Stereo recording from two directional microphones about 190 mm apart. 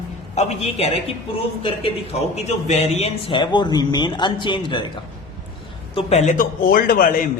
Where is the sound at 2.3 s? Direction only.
35° left (ahead or behind).